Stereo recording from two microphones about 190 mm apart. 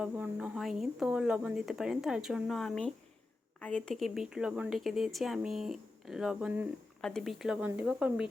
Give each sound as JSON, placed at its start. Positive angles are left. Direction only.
{"t": 0.0, "sound": "speech", "side_deg": -5}